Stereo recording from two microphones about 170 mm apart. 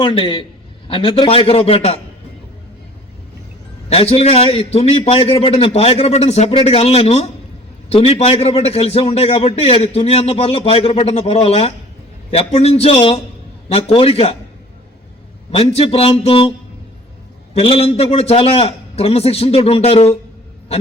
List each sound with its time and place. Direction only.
0.0 s a man's voice: 30° left (ahead or behind)
3.8 s a man's voice: 35° left (ahead or behind)
15.5 s a man's voice: 35° left (ahead or behind)